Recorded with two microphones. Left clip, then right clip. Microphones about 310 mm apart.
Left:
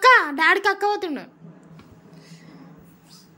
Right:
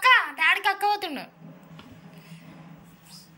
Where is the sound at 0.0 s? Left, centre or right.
Centre.